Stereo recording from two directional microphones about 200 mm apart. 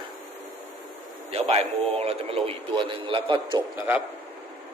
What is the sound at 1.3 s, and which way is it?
A man's voice, 30° right (ahead or behind).